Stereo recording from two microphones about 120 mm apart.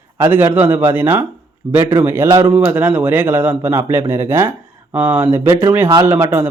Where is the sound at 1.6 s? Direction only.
50° right (ahead or behind).